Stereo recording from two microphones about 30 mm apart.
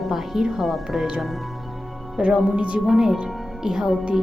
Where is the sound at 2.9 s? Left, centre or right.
Centre.